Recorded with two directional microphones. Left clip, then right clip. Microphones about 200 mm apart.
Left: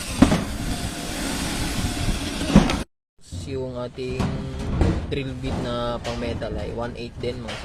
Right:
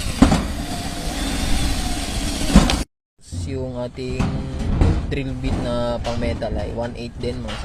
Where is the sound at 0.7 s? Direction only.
15° left (ahead or behind).